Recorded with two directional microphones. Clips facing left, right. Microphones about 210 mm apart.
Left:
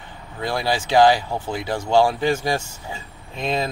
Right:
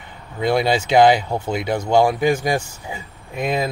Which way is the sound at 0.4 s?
20° right (ahead or behind).